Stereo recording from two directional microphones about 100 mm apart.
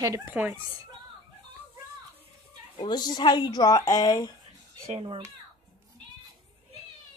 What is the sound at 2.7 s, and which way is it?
Speech, 45° left (ahead or behind).